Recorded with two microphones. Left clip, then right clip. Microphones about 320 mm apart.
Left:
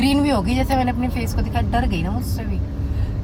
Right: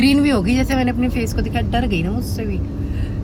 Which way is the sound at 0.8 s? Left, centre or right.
Left.